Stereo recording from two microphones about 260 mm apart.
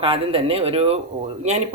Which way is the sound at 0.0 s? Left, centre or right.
Right.